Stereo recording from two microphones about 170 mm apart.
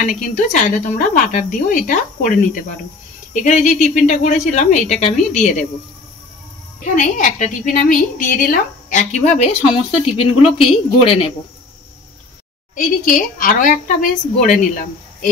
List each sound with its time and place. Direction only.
0.0 s speech: 45° left (ahead or behind)
6.8 s a woman's voice: 50° left (ahead or behind); by 11.3 s 35° left (ahead or behind)
12.7 s speech: 55° left (ahead or behind)